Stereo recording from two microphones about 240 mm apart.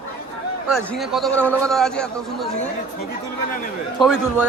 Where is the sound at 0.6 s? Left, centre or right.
Centre.